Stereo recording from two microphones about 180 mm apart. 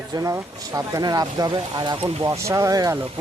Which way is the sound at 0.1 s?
20° right (ahead or behind).